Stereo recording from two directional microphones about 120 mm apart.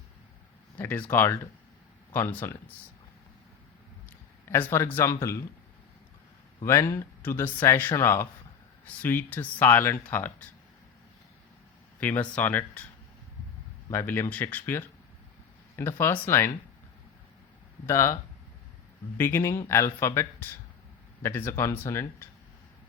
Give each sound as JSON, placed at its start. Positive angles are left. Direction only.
{"t": 0.8, "sound": "speech", "side_deg": 15}
{"t": 4.4, "sound": "speech", "side_deg": 20}
{"t": 6.7, "sound": "speech", "side_deg": 25}
{"t": 11.9, "sound": "speech", "side_deg": 15}
{"t": 13.9, "sound": "speech", "side_deg": 20}
{"t": 17.8, "sound": "speech", "side_deg": 25}